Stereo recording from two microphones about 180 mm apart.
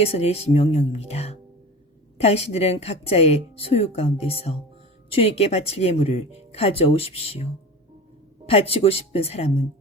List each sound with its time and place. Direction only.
0.0 s speech: 35° left (ahead or behind)
8.4 s speech: 35° left (ahead or behind)